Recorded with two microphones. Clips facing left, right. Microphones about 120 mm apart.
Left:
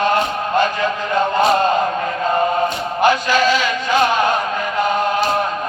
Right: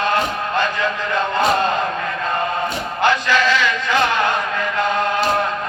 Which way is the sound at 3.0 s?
15° left (ahead or behind).